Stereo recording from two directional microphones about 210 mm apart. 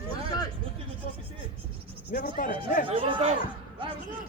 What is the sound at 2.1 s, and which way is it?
Speech, 40° left (ahead or behind).